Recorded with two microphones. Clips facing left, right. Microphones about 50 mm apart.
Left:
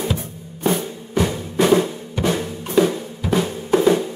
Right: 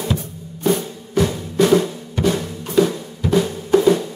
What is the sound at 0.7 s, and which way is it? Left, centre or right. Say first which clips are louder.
Drum: right 1 dB; centre.